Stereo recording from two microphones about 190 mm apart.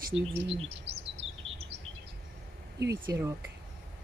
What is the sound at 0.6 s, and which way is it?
Speech, 35° right (ahead or behind).